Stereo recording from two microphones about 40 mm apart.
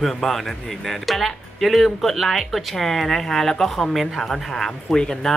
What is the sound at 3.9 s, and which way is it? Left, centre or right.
Speech, centre.